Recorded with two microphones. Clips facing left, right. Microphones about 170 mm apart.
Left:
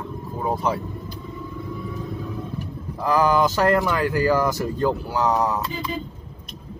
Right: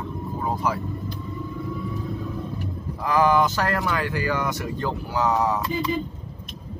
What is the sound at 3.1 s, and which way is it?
Speech, 35° left (ahead or behind).